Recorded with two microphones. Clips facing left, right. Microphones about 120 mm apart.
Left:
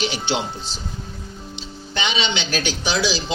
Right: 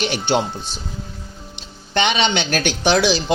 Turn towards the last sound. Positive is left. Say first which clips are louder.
# right 6 dB
turn(degrees=-60)  # may be behind; listen again after turning